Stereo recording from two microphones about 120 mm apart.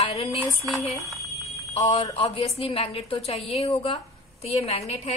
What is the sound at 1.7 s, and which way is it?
A woman's voice, 65° left (ahead or behind).